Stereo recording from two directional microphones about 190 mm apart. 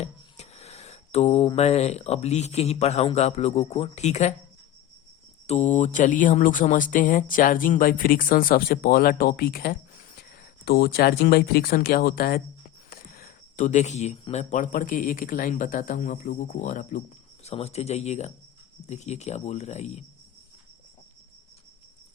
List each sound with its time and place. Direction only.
0.0 s speech: 35° left (ahead or behind)
5.5 s a sound: 35° left (ahead or behind)
17.4 s speech: 35° left (ahead or behind)